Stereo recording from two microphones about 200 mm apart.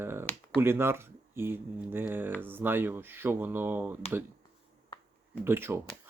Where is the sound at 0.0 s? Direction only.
10° right (ahead or behind).